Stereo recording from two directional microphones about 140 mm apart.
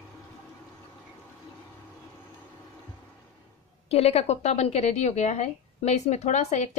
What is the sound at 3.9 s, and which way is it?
A woman's voice, 45° left (ahead or behind).